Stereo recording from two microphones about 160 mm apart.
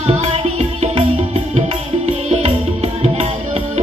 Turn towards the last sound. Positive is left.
turn(degrees=-40)  # may be behind; listen again after turning